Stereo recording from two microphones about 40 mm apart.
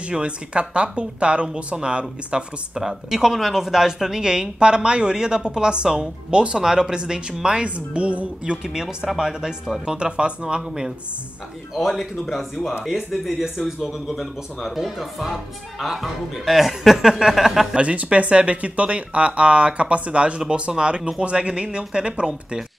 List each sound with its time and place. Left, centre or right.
0.0 s speech: right
2.7 s speech: centre; by 8.3 s right
8.6 s speech: centre
11.7 s speech: centre
17.7 s speech: right